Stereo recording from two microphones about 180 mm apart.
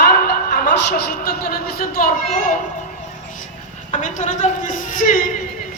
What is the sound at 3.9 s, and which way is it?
A woman's voice, 45° left (ahead or behind).